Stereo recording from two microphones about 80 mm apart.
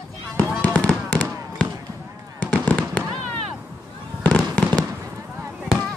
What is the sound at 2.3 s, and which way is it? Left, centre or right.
Fireworks, centre.